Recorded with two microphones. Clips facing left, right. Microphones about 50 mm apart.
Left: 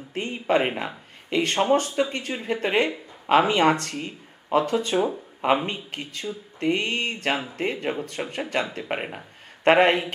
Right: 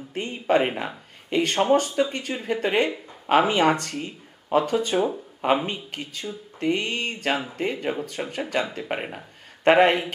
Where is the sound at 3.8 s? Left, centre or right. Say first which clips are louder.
Even; centre.